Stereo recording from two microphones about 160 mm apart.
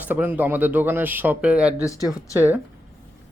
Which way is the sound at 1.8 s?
20° left (ahead or behind).